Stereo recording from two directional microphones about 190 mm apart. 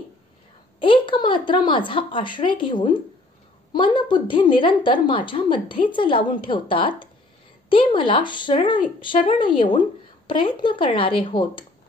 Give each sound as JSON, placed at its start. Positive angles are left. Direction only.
{"t": 0.7, "sound": "speech", "side_deg": 25}